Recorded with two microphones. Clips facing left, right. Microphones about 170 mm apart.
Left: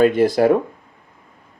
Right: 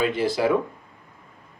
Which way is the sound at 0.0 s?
50° left (ahead or behind).